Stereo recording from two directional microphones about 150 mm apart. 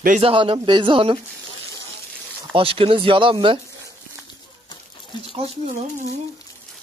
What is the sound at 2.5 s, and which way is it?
Speech, 40° right (ahead or behind).